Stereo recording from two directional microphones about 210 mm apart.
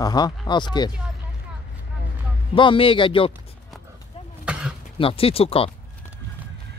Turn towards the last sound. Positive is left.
turn(degrees=25)  # may be behind; listen again after turning